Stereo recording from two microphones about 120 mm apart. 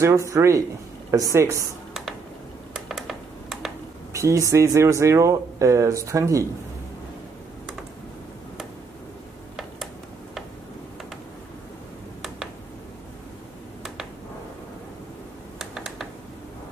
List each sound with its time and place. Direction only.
0.0 s speech: 25° right (ahead or behind)
2.9 s computer keyboard: centre (ahead or behind)
4.1 s speech: 25° right (ahead or behind)
15.6 s computer keyboard: centre (ahead or behind)